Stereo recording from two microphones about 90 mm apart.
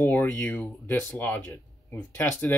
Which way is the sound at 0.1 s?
20° left (ahead or behind).